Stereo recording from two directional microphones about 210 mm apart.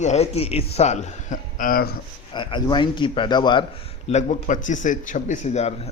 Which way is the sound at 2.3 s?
20° left (ahead or behind).